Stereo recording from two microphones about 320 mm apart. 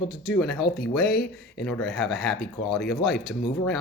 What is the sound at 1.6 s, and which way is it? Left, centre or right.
Speech, centre.